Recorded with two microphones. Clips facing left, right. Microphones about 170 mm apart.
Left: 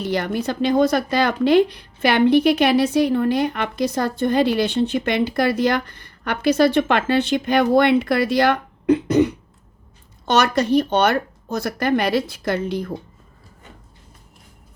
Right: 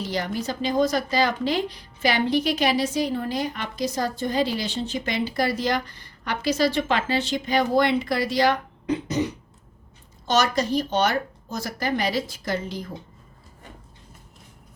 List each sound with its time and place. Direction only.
0.0 s speech: 60° left (ahead or behind)